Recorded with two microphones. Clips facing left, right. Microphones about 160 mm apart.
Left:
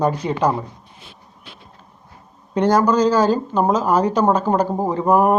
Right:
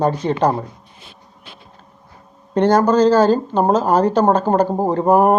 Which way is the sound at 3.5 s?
35° right (ahead or behind).